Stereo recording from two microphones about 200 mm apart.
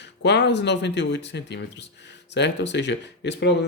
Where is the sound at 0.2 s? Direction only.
60° left (ahead or behind).